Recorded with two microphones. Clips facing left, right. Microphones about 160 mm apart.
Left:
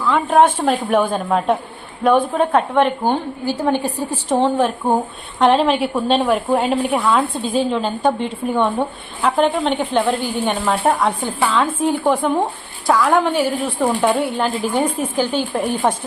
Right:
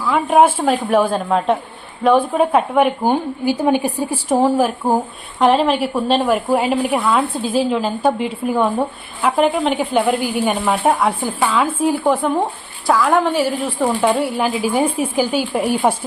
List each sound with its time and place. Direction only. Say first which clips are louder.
0.0 s a woman's voice: right 1 dB; 10° right (ahead or behind)